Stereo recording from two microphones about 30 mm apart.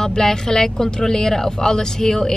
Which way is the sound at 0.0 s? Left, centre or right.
Left.